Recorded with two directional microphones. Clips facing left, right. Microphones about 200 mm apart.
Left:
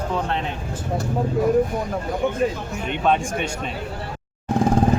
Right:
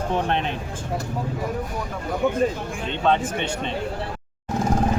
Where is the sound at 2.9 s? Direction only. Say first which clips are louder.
Left 1 dB; 15° left (ahead or behind).